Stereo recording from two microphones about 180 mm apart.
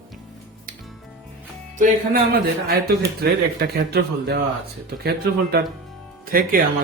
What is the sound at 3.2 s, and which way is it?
A man's voice, 65° right (ahead or behind).